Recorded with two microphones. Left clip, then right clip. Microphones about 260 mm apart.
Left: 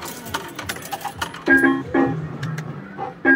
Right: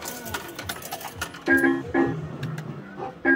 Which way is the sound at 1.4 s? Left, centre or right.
Centre.